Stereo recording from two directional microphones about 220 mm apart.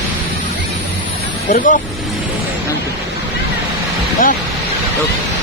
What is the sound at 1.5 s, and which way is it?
Speech, 35° left (ahead or behind).